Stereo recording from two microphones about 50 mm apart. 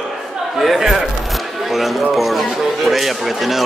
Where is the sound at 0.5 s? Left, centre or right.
Centre.